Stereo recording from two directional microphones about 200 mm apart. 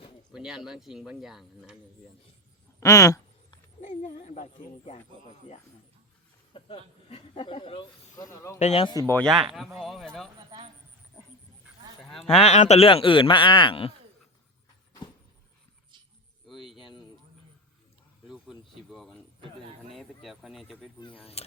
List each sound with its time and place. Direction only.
0.3 s speech: 5° right (ahead or behind)
2.8 s a sound: 15° left (ahead or behind)
3.8 s speech: 35° left (ahead or behind)
6.5 s speech: 25° left (ahead or behind)
8.5 s speech: 30° left (ahead or behind)
9.2 s speech: 20° right (ahead or behind)
9.7 s speech: centre (ahead or behind)
12.0 s a sound: centre (ahead or behind)
12.3 s speech: 30° left (ahead or behind)
16.5 s a sound: centre (ahead or behind)
18.3 s a sound: centre (ahead or behind)
21.0 s speech: 25° left (ahead or behind)